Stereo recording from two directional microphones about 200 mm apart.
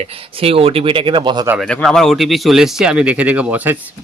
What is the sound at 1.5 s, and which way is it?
Speech, centre (ahead or behind).